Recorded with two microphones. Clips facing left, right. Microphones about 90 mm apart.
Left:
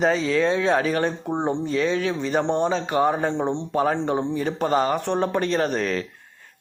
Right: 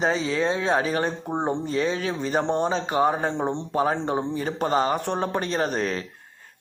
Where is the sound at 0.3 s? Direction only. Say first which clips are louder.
Left 3 dB; 30° right (ahead or behind).